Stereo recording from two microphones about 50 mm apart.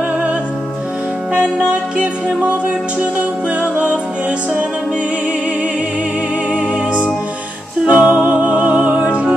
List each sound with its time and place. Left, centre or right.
1.3 s music: right
3.2 s music: right
6.5 s music: right